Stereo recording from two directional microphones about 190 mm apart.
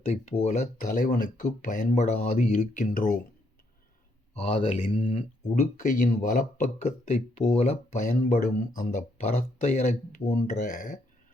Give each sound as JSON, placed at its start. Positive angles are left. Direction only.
{"t": 0.0, "sound": "speech", "side_deg": 35}
{"t": 4.4, "sound": "speech", "side_deg": 30}
{"t": 5.7, "sound": "speech", "side_deg": 40}